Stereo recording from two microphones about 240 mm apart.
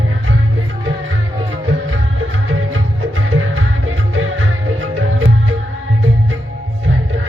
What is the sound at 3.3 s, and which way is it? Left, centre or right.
Music, right.